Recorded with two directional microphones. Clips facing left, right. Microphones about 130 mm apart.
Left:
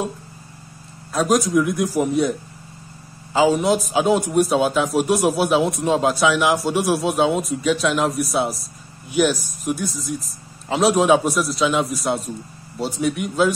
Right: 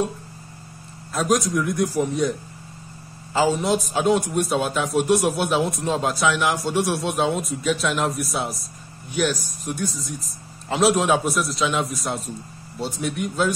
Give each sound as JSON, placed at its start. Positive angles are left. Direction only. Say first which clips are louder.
{"t": 1.1, "sound": "speech", "louder": "left 4 dB", "side_deg": 0}
{"t": 3.3, "sound": "speech", "louder": "left 3 dB", "side_deg": 0}